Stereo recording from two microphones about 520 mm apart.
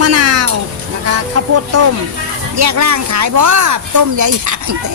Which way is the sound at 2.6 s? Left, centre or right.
Right.